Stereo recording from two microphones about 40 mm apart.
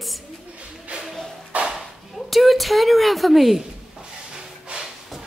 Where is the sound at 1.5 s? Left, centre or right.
Right.